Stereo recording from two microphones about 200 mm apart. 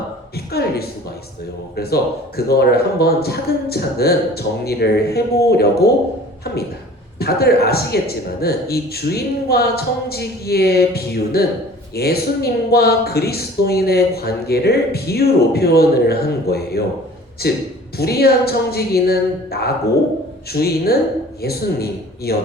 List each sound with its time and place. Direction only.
0.3 s speech: 50° left (ahead or behind)
6.4 s a sound: 50° left (ahead or behind)
7.2 s speech: 50° left (ahead or behind)